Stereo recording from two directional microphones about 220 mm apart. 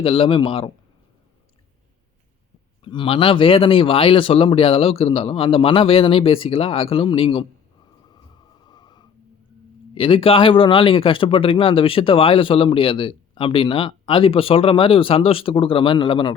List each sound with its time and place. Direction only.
0.0 s speech: 25° left (ahead or behind)
2.8 s speech: 20° left (ahead or behind)
8.6 s a sound: 20° left (ahead or behind)
9.9 s speech: 25° left (ahead or behind)